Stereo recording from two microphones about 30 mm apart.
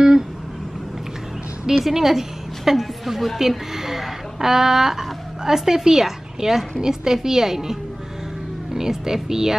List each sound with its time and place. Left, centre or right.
1.7 s a woman's voice: centre
8.7 s a woman's voice: centre